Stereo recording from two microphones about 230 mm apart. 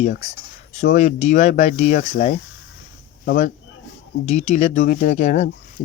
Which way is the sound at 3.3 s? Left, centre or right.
Left.